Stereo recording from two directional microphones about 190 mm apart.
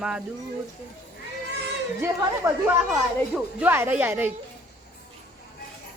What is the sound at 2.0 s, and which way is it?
A woman's voice, 10° right (ahead or behind).